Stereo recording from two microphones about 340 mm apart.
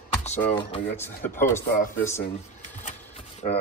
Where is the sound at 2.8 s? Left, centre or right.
Centre.